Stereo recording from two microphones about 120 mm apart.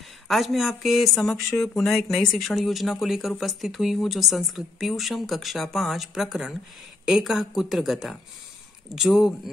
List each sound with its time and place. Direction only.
0.3 s speech: centre (ahead or behind)